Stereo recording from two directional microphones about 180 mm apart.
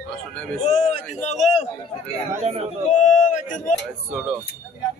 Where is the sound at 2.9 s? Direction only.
40° left (ahead or behind).